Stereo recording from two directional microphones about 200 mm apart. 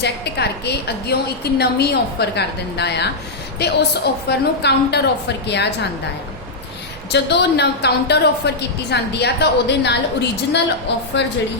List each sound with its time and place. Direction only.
0.0 s a woman's voice: 55° left (ahead or behind)
7.1 s a woman's voice: 55° left (ahead or behind)